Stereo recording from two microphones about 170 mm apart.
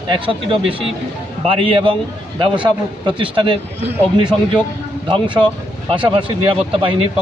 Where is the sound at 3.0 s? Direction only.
30° right (ahead or behind).